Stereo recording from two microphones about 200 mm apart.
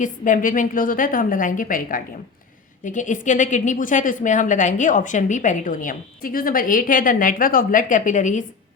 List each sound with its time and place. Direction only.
0.0 s a woman's voice: 40° left (ahead or behind)